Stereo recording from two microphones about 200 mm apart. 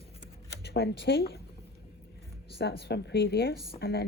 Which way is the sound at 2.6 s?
55° left (ahead or behind).